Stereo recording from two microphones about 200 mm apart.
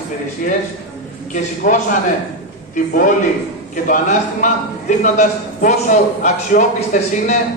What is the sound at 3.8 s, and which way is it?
Speech, 40° left (ahead or behind).